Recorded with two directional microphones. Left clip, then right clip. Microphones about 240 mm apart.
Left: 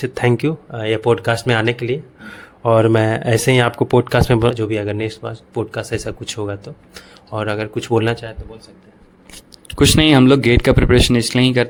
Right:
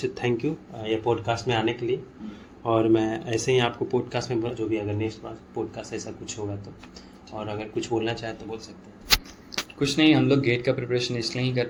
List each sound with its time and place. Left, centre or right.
0.0 s speech: left
9.7 s speech: left